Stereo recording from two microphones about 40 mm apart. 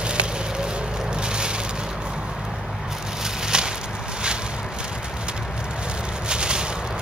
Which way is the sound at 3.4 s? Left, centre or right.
Centre.